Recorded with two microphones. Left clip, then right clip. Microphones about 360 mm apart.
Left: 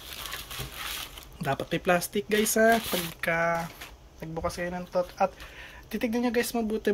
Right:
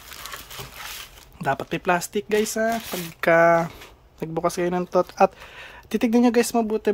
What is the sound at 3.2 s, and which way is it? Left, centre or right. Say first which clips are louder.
Speech: right 12 dB; centre.